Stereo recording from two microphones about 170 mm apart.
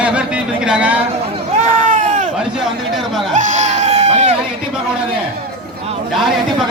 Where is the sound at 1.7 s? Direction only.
50° right (ahead or behind).